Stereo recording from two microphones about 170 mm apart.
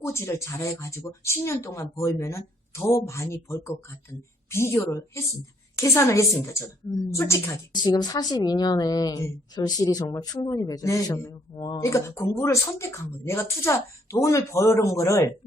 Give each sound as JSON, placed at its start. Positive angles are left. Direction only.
{"t": 0.0, "sound": "a woman's voice", "side_deg": 15}